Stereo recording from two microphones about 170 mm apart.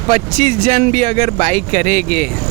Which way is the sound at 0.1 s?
40° right (ahead or behind).